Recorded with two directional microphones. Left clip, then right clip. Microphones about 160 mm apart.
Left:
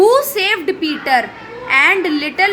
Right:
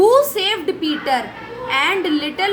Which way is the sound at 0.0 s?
30° left (ahead or behind).